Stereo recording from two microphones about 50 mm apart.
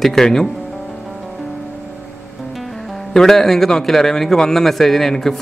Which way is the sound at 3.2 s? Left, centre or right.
Centre.